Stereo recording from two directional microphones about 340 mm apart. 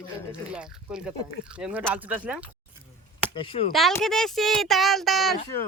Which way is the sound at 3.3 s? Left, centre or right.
Centre.